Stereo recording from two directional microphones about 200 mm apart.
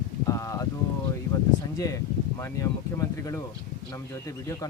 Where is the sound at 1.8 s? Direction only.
15° left (ahead or behind).